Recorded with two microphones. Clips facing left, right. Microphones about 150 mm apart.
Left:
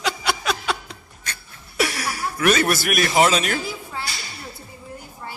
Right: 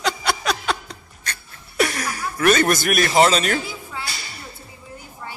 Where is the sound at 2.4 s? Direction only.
5° left (ahead or behind).